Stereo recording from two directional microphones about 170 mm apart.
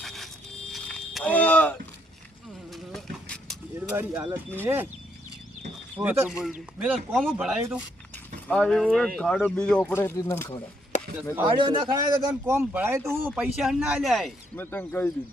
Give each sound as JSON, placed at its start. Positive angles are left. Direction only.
{"t": 0.0, "sound": "a sound", "side_deg": 0}
{"t": 2.7, "sound": "vehicle", "side_deg": 0}
{"t": 3.8, "sound": "speech", "side_deg": -10}
{"t": 6.0, "sound": "speech", "side_deg": -10}
{"t": 11.4, "sound": "a man's voice", "side_deg": -30}
{"t": 14.5, "sound": "speech", "side_deg": 10}